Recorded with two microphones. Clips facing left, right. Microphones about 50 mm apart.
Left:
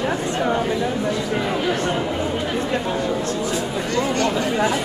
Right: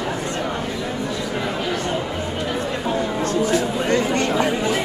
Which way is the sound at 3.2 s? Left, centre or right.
Right.